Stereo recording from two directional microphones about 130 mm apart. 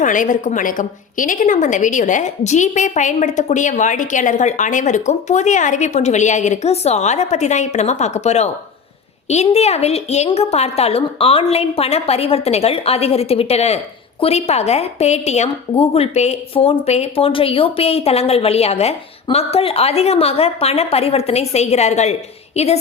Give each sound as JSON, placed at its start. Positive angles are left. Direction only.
{"t": 0.0, "sound": "a woman's voice", "side_deg": 90}